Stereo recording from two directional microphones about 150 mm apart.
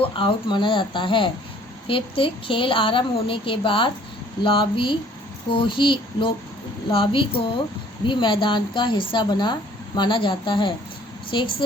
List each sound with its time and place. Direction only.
0.0 s speech: 35° left (ahead or behind)